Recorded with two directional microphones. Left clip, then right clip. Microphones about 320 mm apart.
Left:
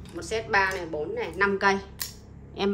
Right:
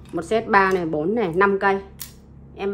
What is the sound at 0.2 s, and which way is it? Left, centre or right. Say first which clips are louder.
A woman's voice: right 7 dB; centre.